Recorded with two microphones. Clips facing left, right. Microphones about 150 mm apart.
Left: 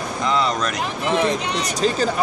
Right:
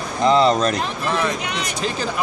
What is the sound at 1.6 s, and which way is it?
Speech, 40° left (ahead or behind).